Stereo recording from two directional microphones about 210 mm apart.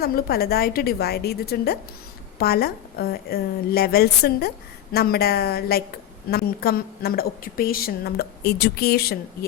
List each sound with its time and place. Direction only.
0.0 s a woman's voice: 45° left (ahead or behind)